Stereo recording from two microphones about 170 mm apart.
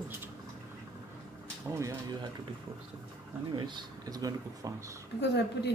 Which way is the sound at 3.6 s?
25° right (ahead or behind).